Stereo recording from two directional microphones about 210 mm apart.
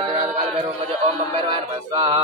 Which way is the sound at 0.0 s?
35° right (ahead or behind).